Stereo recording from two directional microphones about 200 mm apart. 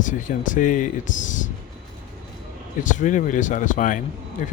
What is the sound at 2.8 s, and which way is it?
Speech, 40° left (ahead or behind).